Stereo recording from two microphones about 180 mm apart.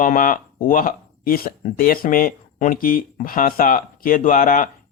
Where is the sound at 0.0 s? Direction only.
50° left (ahead or behind).